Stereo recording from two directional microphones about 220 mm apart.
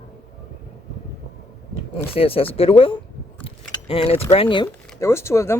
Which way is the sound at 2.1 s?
25° left (ahead or behind).